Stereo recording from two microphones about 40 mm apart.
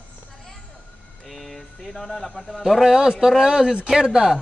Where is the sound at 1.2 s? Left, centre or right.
Centre.